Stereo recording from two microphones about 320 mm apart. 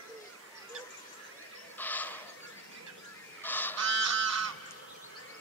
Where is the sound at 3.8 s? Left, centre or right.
Right.